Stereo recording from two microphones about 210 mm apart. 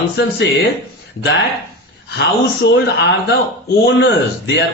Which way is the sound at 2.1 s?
50° left (ahead or behind).